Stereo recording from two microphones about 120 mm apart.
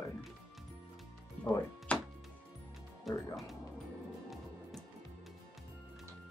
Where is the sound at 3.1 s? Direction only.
Centre (ahead or behind).